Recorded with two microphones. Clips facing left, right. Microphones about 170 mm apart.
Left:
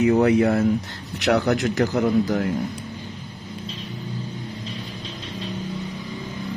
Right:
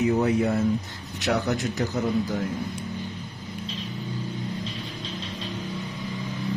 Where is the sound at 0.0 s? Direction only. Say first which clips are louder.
Left 5 dB; 75° left (ahead or behind).